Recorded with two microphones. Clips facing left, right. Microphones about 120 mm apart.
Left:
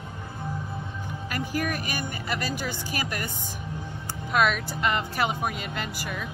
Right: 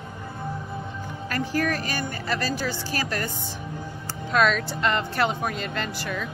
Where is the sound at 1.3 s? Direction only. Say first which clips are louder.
Right 4 dB; 15° left (ahead or behind).